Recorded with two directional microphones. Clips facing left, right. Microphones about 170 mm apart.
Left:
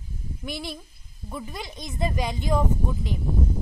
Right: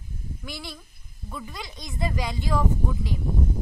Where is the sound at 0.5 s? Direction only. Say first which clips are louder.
Left 6 dB; 20° left (ahead or behind).